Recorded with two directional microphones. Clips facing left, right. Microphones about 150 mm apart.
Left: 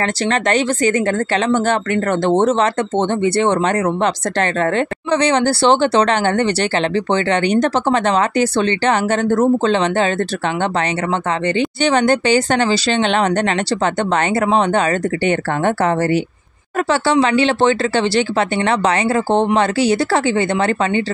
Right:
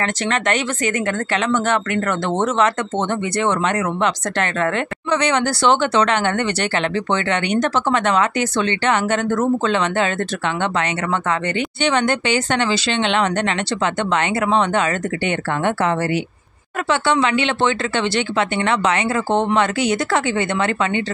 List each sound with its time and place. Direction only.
0.0 s speech: 35° left (ahead or behind)
11.5 s speech: 35° left (ahead or behind)